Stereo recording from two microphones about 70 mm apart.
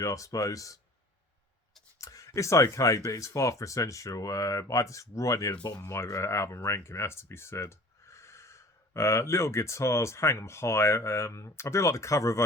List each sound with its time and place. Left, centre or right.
0.0 s speech: left
2.0 s speech: left
5.8 s speech: left